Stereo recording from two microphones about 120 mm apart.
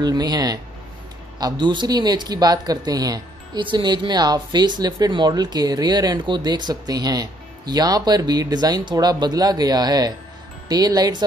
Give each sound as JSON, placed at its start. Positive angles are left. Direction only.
{"t": 0.0, "sound": "speech", "side_deg": -35}